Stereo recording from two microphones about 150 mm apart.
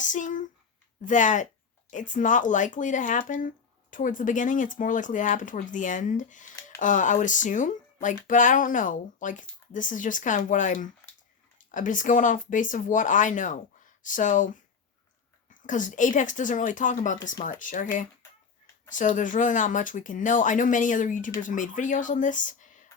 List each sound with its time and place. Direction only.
0.0 s a sound: 55° left (ahead or behind)
1.0 s speech: 55° left (ahead or behind)
15.6 s speech: 60° left (ahead or behind)